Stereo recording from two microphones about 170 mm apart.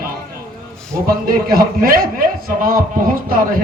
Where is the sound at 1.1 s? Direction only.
60° right (ahead or behind).